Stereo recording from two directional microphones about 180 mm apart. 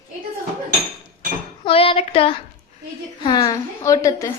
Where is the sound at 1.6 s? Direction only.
30° left (ahead or behind).